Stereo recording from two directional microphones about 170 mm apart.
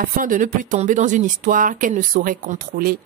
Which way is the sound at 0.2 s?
50° right (ahead or behind).